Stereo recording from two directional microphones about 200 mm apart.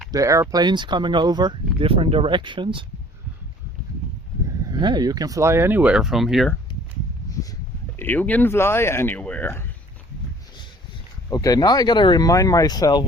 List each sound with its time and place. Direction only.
0.1 s speech: 15° right (ahead or behind)
4.7 s speech: 20° right (ahead or behind); by 6.5 s centre (ahead or behind)
7.9 s speech: 10° left (ahead or behind)
11.3 s speech: 20° left (ahead or behind)